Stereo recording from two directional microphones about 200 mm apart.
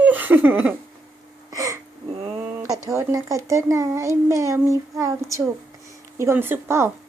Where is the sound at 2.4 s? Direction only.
15° right (ahead or behind).